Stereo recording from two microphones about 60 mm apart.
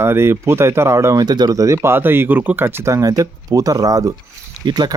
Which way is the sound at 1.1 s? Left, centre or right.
Right.